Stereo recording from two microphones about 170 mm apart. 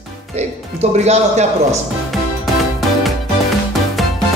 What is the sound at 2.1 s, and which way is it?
Music, centre (ahead or behind).